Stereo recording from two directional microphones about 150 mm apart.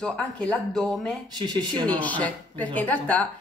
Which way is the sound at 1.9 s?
10° left (ahead or behind).